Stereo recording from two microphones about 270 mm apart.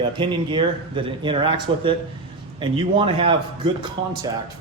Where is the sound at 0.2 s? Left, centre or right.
Centre.